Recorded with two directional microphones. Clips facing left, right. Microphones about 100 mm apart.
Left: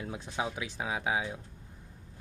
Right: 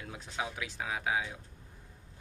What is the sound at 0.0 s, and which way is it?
Speech, 20° left (ahead or behind).